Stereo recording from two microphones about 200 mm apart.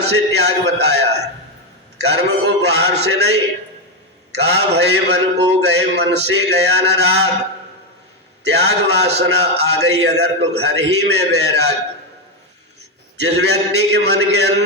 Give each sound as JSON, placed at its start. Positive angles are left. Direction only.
{"t": 0.1, "sound": "a man's voice", "side_deg": -55}
{"t": 8.4, "sound": "a man's voice", "side_deg": -55}
{"t": 13.2, "sound": "a man's voice", "side_deg": -60}